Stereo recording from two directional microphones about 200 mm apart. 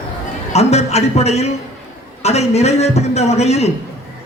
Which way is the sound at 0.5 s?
35° left (ahead or behind).